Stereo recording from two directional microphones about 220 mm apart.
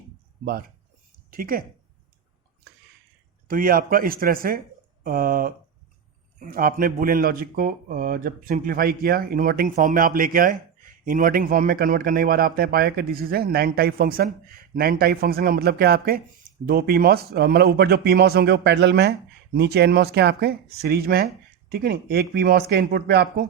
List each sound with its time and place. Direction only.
1.3 s a woman's voice: 40° right (ahead or behind)
3.5 s speech: 40° right (ahead or behind)